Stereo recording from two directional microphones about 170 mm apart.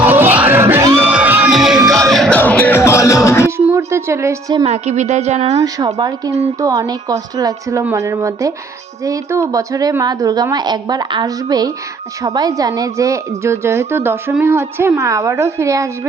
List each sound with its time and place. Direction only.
0.0 s music: 10° right (ahead or behind); by 3.5 s 15° left (ahead or behind)
3.7 s a woman's voice: 15° right (ahead or behind)
4.6 s a woman's voice: 40° right (ahead or behind)
5.5 s a woman's voice: 20° right (ahead or behind)